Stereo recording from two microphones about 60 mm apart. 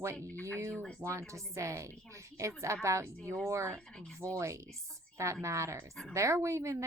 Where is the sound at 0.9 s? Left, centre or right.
Right.